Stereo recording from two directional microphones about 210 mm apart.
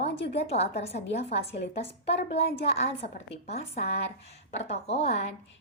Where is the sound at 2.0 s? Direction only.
30° left (ahead or behind).